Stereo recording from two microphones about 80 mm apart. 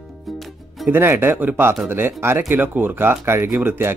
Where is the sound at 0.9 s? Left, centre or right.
Right.